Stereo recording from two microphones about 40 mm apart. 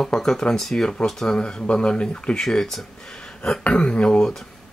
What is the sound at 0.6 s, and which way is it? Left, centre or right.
Speech, centre.